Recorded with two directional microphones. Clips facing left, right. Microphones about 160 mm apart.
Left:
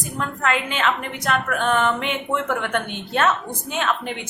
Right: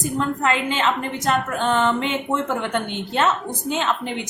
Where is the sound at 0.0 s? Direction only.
20° right (ahead or behind).